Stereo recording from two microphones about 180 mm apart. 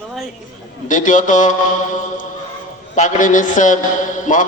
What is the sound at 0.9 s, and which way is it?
A man's voice, 45° left (ahead or behind).